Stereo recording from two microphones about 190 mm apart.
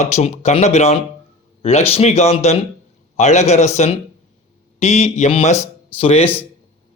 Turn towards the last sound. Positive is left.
turn(degrees=10)  # may be behind; listen again after turning